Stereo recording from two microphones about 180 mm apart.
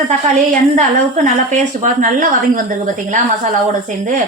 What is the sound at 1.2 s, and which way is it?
A woman's voice, 45° right (ahead or behind).